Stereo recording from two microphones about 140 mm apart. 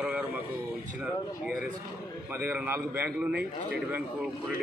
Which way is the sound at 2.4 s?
15° right (ahead or behind).